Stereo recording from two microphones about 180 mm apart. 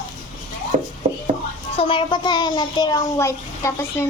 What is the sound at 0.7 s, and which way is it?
Chopping, 45° right (ahead or behind).